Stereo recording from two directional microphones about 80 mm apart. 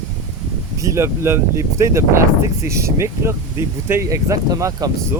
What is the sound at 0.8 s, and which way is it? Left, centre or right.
Speech, right.